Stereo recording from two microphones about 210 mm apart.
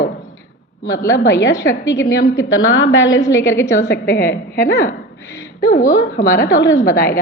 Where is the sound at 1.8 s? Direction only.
15° left (ahead or behind).